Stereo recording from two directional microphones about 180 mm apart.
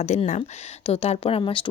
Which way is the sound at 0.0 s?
40° left (ahead or behind).